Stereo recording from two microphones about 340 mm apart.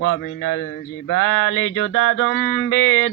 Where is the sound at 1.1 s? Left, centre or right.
Left.